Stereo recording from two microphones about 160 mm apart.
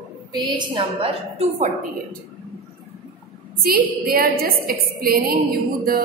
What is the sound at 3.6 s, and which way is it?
A woman's voice, 70° right (ahead or behind).